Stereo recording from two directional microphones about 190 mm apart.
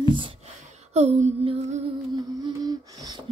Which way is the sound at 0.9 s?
35° right (ahead or behind).